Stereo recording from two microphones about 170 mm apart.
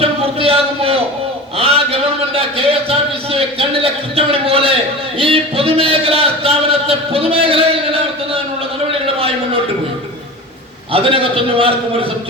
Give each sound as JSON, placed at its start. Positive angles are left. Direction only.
{"t": 0.0, "sound": "a sound", "side_deg": -35}
{"t": 3.2, "sound": "a man's voice", "side_deg": -35}
{"t": 10.9, "sound": "a man's voice", "side_deg": -30}